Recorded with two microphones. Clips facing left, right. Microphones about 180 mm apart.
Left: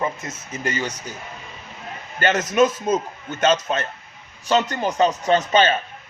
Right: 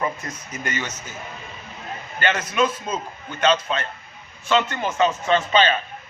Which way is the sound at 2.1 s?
40° left (ahead or behind).